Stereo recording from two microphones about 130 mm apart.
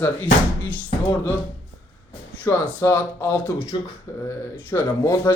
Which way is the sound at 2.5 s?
15° left (ahead or behind).